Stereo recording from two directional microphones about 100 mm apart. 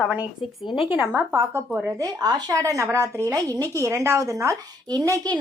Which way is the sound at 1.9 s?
40° right (ahead or behind).